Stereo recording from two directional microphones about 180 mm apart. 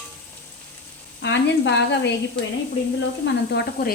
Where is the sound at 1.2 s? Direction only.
75° left (ahead or behind).